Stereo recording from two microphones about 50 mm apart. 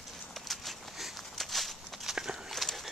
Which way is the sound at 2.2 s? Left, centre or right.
Centre.